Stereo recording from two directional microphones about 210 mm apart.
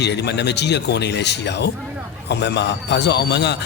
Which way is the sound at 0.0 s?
55° left (ahead or behind).